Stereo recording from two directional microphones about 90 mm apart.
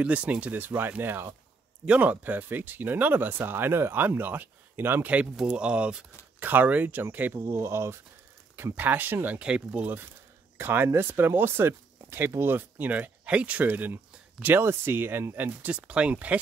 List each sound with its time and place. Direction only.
0.0 s speech: 15° right (ahead or behind)